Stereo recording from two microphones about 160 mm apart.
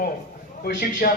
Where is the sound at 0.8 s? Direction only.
65° left (ahead or behind).